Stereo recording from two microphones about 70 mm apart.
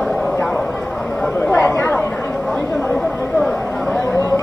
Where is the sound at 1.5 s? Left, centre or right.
Left.